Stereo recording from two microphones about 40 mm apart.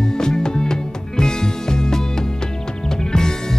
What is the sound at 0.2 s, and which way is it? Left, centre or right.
Music, centre.